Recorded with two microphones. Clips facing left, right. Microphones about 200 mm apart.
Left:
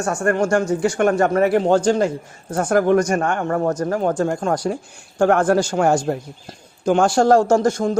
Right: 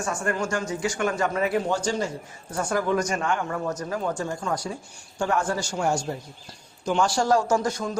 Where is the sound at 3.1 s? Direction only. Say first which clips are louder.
Left 7 dB; 50° left (ahead or behind).